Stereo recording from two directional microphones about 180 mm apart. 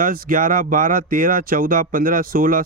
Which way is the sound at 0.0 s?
50° right (ahead or behind).